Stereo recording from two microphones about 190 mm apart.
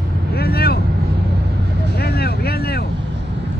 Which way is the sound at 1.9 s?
55° left (ahead or behind).